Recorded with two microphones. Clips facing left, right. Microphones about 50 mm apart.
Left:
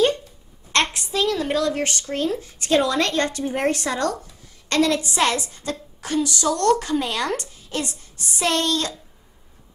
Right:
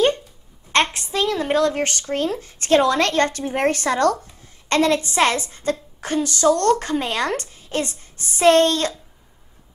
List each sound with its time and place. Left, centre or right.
1.1 s a woman's voice: right